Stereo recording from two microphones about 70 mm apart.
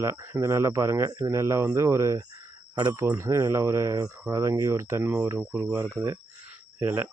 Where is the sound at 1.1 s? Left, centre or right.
Right.